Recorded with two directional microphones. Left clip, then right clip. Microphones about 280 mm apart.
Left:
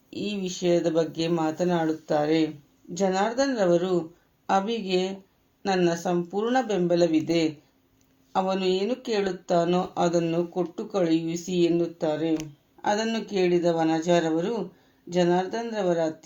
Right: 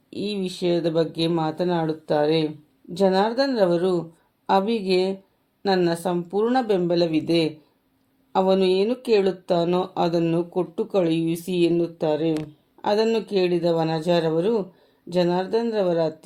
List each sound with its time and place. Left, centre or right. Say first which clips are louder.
0.1 s speech: right 3 dB; right